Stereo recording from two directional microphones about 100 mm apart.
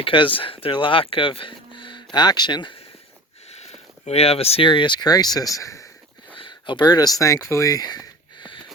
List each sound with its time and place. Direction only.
0.0 s speech: 60° left (ahead or behind)
4.1 s speech: 90° left; by 5.9 s 30° left (ahead or behind)
6.4 s a sound: 55° left (ahead or behind)